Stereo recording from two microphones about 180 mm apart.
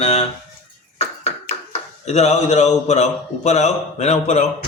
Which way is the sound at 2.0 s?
40° left (ahead or behind).